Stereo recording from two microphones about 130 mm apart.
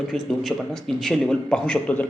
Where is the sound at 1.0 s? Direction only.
5° left (ahead or behind).